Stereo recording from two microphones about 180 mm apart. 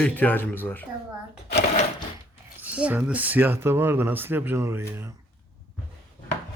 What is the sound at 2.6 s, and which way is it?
Speech, 5° right (ahead or behind).